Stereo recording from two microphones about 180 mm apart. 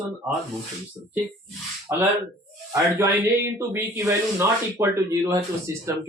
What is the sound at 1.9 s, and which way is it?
Speech, 15° right (ahead or behind).